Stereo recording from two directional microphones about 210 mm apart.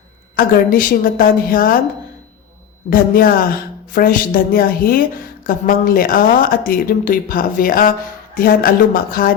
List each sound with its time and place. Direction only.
0.3 s a woman's voice: 40° left (ahead or behind)
2.9 s a woman's voice: 45° left (ahead or behind)